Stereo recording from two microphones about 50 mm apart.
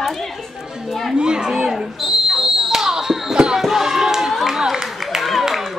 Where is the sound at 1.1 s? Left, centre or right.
Centre.